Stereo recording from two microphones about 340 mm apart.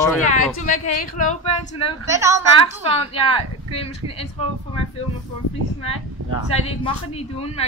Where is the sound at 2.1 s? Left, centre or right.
Centre.